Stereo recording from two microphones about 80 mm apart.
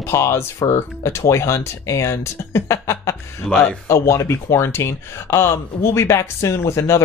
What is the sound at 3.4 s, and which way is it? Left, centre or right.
Speech, centre.